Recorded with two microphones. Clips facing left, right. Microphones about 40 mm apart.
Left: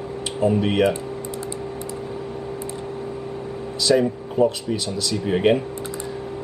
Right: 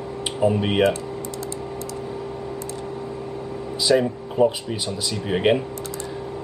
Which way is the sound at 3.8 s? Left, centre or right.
Centre.